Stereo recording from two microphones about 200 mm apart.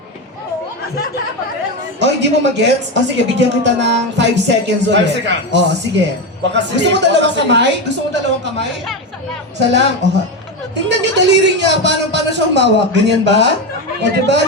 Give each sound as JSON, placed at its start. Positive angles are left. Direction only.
{"t": 2.0, "sound": "speech", "side_deg": -60}
{"t": 10.0, "sound": "speech", "side_deg": -60}